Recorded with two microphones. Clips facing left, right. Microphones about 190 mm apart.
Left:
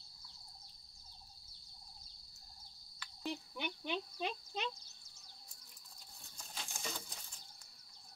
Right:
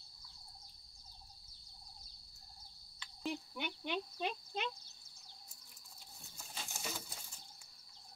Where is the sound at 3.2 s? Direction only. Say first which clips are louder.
Right 1 dB; 5° right (ahead or behind).